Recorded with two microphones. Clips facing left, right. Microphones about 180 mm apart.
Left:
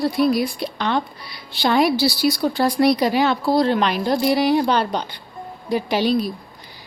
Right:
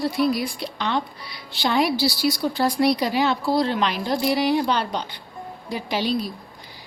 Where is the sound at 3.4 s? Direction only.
45° left (ahead or behind).